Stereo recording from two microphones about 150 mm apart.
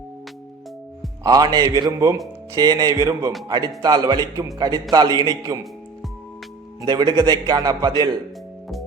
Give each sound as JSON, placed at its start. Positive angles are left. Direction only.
{"t": 1.2, "sound": "a man's voice", "side_deg": -25}
{"t": 6.8, "sound": "a man's voice", "side_deg": -30}